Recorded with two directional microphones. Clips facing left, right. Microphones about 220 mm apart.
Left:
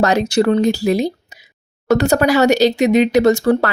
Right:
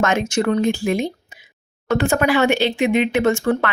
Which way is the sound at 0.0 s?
35° left (ahead or behind).